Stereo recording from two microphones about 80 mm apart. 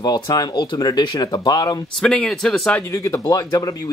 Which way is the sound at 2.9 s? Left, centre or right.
Left.